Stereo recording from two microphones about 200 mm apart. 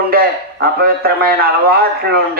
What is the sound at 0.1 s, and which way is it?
A man's voice, 50° right (ahead or behind).